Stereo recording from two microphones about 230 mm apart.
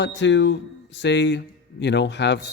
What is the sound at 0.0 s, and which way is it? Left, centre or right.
Speech, left.